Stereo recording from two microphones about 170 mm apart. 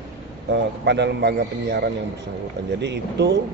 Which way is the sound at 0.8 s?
90° right.